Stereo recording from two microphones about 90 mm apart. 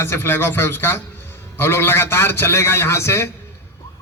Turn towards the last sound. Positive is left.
turn(degrees=30)  # may be behind; listen again after turning